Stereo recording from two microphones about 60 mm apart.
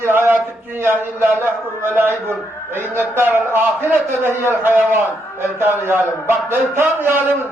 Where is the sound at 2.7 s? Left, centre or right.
Right.